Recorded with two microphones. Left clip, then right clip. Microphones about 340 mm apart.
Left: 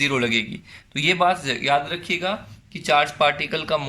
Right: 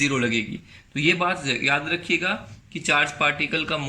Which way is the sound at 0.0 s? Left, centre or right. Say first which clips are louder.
Left 2 dB; centre.